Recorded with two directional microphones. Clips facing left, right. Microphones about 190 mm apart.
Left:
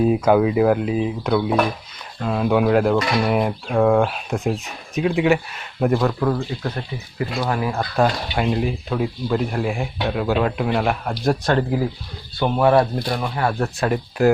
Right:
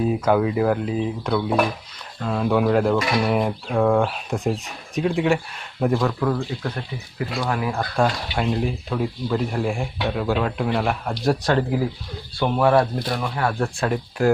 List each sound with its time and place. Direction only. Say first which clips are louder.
0.0 s speech: left 3 dB; 15° left (ahead or behind)
3.8 s speech: left 2 dB; 15° left (ahead or behind)
4.1 s speech: left 1 dB; centre (ahead or behind)
12.4 s speech: left 2 dB; 10° left (ahead or behind)